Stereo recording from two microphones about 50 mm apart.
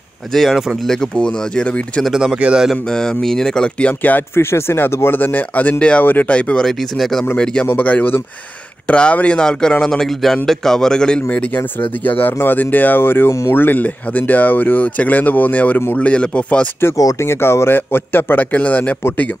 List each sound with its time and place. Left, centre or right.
0.3 s speech: centre
1.1 s speech: left
2.3 s a man's voice: right
2.7 s speech: centre
4.4 s speech: left
5.2 s speech: left
5.8 s speech: left
6.0 s speech: left
6.6 s speech: centre
7.6 s speech: left
8.8 s speech: left
9.4 s speech: centre
11.2 s speech: left
16.8 s a man's voice: left